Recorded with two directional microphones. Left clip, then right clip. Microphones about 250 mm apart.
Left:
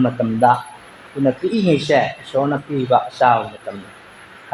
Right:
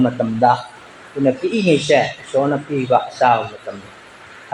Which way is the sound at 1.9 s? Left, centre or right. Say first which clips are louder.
Right 1 dB; left.